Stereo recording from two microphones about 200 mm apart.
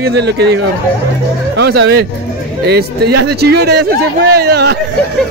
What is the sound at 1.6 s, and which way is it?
A man's voice, 55° right (ahead or behind).